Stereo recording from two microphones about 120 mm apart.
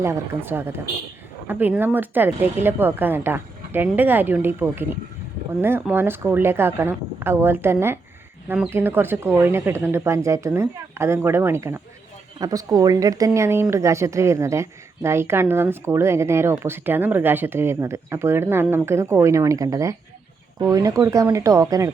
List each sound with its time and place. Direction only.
0.0 s a woman's voice: 20° right (ahead or behind)
5.9 s a woman's voice: 20° right (ahead or behind)
12.4 s a woman's voice: 30° right (ahead or behind)